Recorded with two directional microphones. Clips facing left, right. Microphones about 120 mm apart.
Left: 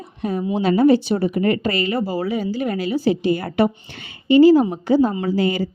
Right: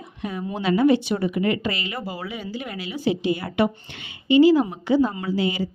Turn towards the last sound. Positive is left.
turn(degrees=45)  # may be behind; listen again after turning